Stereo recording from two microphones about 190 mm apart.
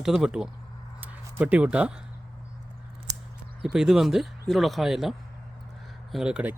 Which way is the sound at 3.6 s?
5° right (ahead or behind).